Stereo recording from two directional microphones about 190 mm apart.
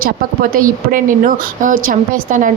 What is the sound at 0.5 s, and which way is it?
A woman's voice, 45° right (ahead or behind).